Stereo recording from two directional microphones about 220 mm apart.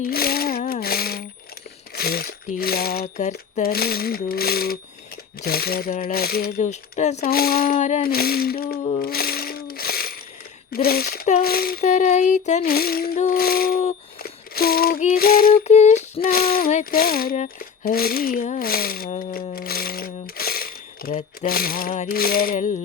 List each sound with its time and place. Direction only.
0.1 s speech: 45° left (ahead or behind)
0.7 s a sound: 45° left (ahead or behind)
2.0 s speech: 45° left (ahead or behind)
7.2 s coin: 45° left (ahead or behind)
10.7 s speech: 45° left (ahead or behind)
14.2 s humming: 45° left (ahead or behind)
21.4 s a sound: 40° left (ahead or behind)